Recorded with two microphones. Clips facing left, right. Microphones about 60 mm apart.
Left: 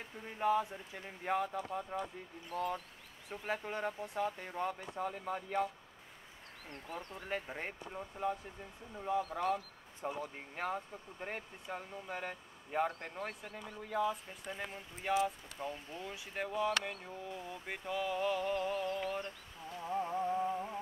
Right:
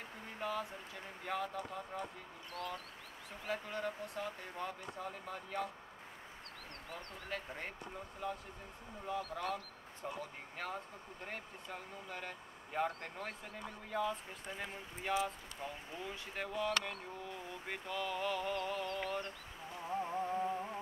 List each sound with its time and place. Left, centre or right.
0.4 s speech: left
6.7 s speech: centre
7.2 s speech: left
9.2 s speech: centre
12.8 s speech: centre
19.8 s music: centre